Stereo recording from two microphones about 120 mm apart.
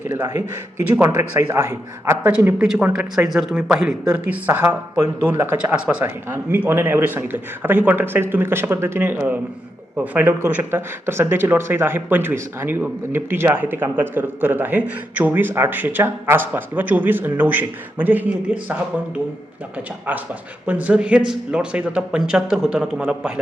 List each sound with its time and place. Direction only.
0.9 s a man's voice: 20° right (ahead or behind)
20.7 s speech: 15° right (ahead or behind)